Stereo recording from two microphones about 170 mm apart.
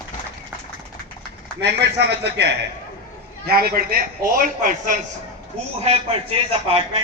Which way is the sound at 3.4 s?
60° right (ahead or behind).